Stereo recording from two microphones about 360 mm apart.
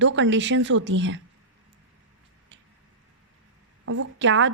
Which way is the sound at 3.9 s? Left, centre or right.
Right.